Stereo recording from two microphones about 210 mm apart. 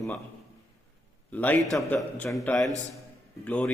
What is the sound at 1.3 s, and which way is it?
A man's voice, 10° left (ahead or behind).